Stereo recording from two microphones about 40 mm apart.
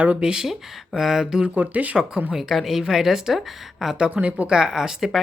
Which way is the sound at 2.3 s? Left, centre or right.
Centre.